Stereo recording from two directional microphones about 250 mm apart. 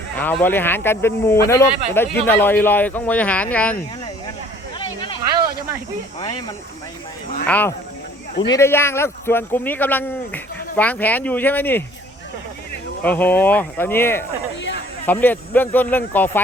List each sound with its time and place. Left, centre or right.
0.2 s speech: centre
4.8 s a sound: centre
7.4 s speech: centre
13.0 s speech: centre